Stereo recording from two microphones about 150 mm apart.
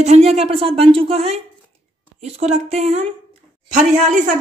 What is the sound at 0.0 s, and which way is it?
Speech, 45° right (ahead or behind).